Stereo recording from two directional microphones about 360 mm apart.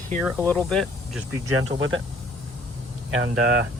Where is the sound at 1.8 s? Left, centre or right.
Right.